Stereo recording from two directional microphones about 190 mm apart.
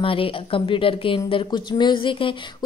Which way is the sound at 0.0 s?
30° left (ahead or behind).